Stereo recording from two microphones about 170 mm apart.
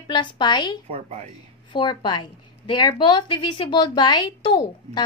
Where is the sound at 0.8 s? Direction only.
40° right (ahead or behind).